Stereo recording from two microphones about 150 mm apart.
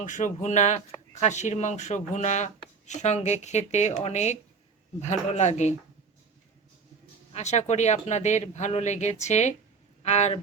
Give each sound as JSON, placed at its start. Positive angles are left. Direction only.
{"t": 0.0, "sound": "speech", "side_deg": 55}
{"t": 7.3, "sound": "speech", "side_deg": 50}